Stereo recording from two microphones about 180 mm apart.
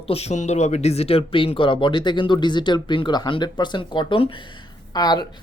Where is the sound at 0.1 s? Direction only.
35° left (ahead or behind).